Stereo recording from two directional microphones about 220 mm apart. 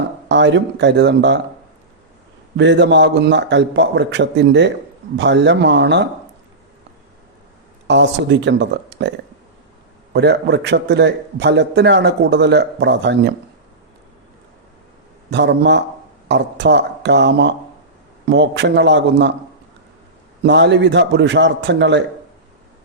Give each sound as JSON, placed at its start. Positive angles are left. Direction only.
{"t": 0.3, "sound": "a man's voice", "side_deg": -55}
{"t": 2.6, "sound": "a man's voice", "side_deg": -55}
{"t": 7.9, "sound": "a man's voice", "side_deg": -55}
{"t": 15.3, "sound": "a man's voice", "side_deg": -50}
{"t": 20.4, "sound": "a man's voice", "side_deg": -50}